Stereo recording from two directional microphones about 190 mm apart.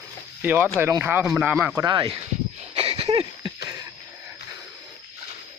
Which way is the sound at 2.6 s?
30° right (ahead or behind).